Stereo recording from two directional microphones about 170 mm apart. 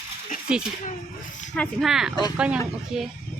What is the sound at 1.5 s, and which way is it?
Speech, 5° left (ahead or behind).